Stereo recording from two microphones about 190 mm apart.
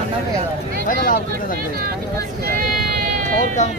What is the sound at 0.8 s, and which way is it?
Speech, 45° left (ahead or behind).